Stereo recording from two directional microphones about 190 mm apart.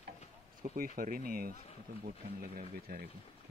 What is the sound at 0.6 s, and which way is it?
Speech, 45° right (ahead or behind).